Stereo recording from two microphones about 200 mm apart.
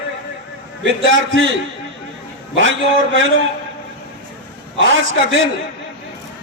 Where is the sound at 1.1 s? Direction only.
70° right (ahead or behind).